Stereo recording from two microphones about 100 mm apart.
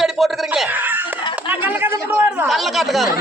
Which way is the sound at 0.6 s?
15° right (ahead or behind).